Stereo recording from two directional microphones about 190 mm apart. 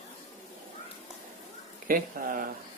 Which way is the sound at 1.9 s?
45° right (ahead or behind).